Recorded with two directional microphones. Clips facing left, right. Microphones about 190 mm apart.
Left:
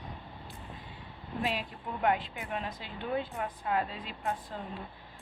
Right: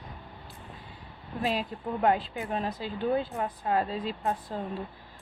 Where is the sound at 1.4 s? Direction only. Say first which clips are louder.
Right 4 dB; 35° right (ahead or behind).